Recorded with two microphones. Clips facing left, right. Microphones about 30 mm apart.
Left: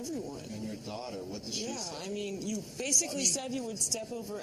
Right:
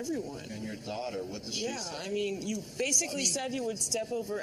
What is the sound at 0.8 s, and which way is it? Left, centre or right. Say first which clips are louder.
Speech: right 3 dB; right.